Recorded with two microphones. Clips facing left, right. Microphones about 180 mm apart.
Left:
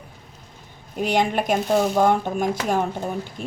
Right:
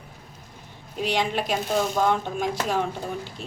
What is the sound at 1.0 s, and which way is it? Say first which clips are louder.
Speech: left 4 dB; 50° left (ahead or behind).